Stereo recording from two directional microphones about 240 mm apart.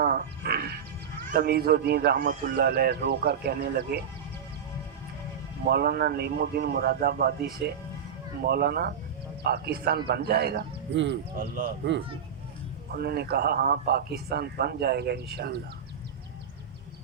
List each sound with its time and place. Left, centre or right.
0.0 s music: right
1.3 s speech: right
5.6 s speech: right
12.9 s speech: right